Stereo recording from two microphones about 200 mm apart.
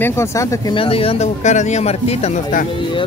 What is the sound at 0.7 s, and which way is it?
Speech, 30° left (ahead or behind).